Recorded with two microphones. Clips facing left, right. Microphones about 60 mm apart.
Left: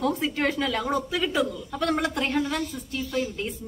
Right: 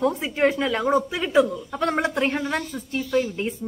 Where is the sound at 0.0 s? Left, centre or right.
Right.